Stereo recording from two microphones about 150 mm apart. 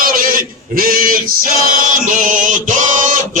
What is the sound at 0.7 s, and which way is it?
Male singing, 70° right (ahead or behind).